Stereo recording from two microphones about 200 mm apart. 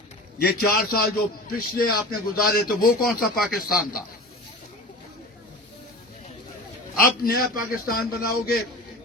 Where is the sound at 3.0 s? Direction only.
Centre (ahead or behind).